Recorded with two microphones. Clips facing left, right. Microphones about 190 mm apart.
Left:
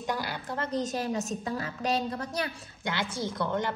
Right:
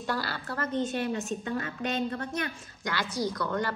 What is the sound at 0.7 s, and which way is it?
A woman's voice, 35° left (ahead or behind).